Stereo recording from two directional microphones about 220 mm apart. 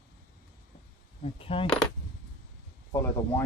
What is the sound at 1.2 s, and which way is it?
Coin, 25° left (ahead or behind).